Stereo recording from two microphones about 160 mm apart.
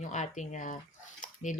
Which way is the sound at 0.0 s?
50° left (ahead or behind).